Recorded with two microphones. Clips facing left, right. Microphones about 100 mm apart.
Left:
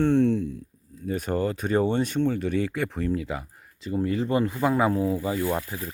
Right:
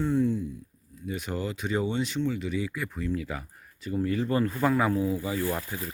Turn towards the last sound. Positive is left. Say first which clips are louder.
# left 1 dB
turn(degrees=5)  # may be behind; listen again after turning